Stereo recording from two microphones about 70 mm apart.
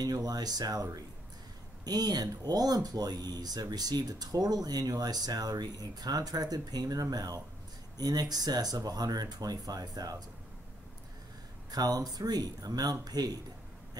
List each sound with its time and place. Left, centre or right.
0.0 s speech: right
11.7 s speech: right